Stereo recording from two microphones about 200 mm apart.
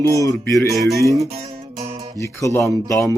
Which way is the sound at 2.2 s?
15° left (ahead or behind).